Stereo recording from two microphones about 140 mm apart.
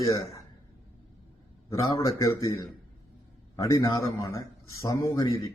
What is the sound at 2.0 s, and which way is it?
Speech, 25° left (ahead or behind).